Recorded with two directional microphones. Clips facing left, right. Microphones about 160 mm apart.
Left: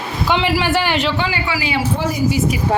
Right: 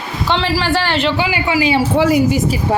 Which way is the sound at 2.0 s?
75° right (ahead or behind).